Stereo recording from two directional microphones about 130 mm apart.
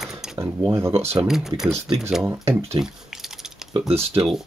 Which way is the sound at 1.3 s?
5° right (ahead or behind).